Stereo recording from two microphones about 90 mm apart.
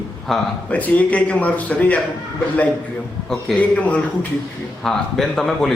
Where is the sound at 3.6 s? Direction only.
15° left (ahead or behind).